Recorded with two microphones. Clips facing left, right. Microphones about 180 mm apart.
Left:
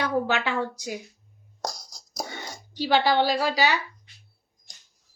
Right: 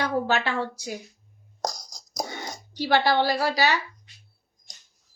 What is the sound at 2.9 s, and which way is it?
Speech, 15° left (ahead or behind).